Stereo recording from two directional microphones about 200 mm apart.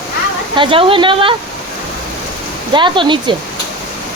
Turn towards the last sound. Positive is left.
turn(degrees=-25)  # may be behind; listen again after turning